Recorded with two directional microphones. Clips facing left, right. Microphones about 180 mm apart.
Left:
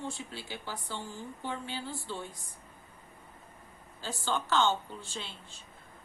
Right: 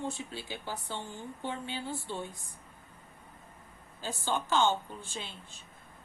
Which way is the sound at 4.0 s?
15° right (ahead or behind).